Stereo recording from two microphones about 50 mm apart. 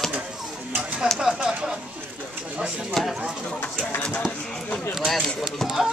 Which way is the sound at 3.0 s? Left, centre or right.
Centre.